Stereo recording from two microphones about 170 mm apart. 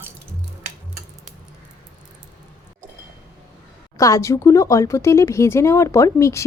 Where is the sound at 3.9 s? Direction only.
20° left (ahead or behind).